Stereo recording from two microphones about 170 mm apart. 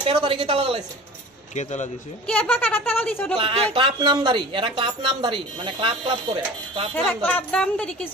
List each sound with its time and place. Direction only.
0.1 s speech: 25° right (ahead or behind)
1.5 s speech: 45° left (ahead or behind)
2.2 s speech: 5° left (ahead or behind)
3.3 s speech: 30° right (ahead or behind)
7.0 s speech: 10° left (ahead or behind)